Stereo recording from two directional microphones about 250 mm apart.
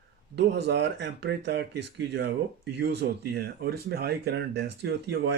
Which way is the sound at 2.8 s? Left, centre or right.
Right.